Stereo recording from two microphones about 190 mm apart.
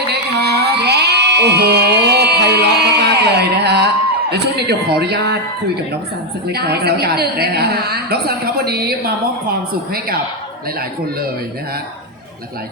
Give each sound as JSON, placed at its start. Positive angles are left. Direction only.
{"t": 0.1, "sound": "music", "side_deg": -60}
{"t": 4.3, "sound": "a man's voice", "side_deg": -60}
{"t": 6.5, "sound": "a woman's voice", "side_deg": -55}